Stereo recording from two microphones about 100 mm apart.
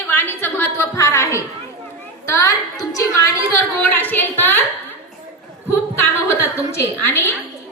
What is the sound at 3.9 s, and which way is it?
Speech, 20° left (ahead or behind).